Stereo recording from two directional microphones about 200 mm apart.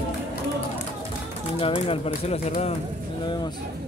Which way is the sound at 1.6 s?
25° left (ahead or behind).